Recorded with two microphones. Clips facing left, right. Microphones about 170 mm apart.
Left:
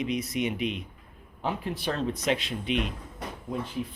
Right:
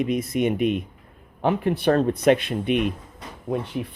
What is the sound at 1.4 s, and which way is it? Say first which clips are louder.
Speech: right 10 dB; 60° right (ahead or behind).